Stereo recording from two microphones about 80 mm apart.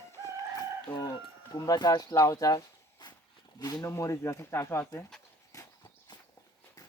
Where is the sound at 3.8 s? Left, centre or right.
Left.